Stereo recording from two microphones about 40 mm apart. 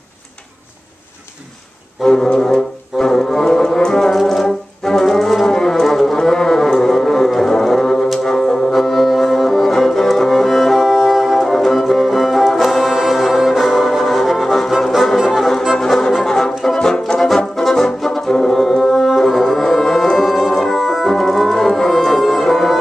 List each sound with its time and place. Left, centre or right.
2.0 s music: centre
4.2 s brass instrument: centre
5.9 s music: centre
6.1 s a sound: centre
7.4 s music: centre
15.2 s brass instrument: centre
15.8 s music: centre
17.6 s brass instrument: centre
18.6 s music: centre
20.8 s organ: centre
21.1 s organ: centre
21.5 s music: centre